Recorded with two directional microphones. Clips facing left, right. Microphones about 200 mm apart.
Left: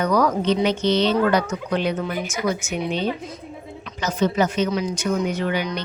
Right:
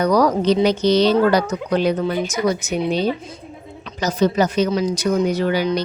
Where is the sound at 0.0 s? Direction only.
35° right (ahead or behind).